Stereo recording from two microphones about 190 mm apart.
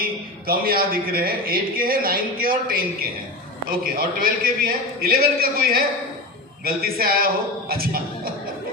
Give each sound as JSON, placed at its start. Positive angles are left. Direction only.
{"t": 0.4, "sound": "a man's voice", "side_deg": -50}